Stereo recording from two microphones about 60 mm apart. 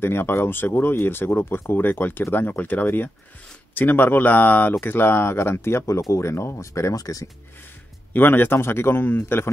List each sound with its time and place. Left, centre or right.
0.0 s speech: left
7.0 s speech: left
8.1 s speech: left